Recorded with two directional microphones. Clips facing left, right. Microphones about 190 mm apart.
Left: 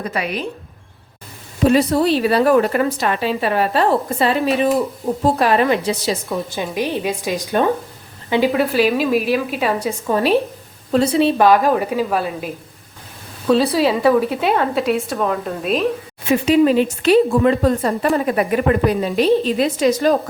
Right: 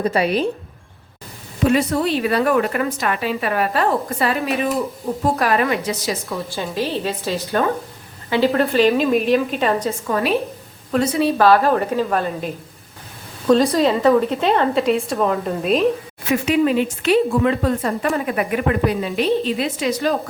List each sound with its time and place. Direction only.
0.0 s speech: 30° right (ahead or behind)
1.6 s a woman's voice: 35° left (ahead or behind)
6.2 s a woman's voice: 15° left (ahead or behind)
10.1 s a woman's voice: 30° left (ahead or behind); by 12.5 s 10° left (ahead or behind)
13.5 s a woman's voice: 5° left (ahead or behind)
16.3 s a woman's voice: 35° left (ahead or behind)